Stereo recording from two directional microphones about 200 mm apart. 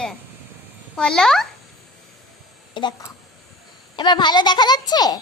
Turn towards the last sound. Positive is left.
turn(degrees=20)  # may be behind; listen again after turning